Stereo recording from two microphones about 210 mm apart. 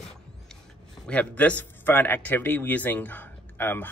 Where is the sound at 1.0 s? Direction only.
5° left (ahead or behind).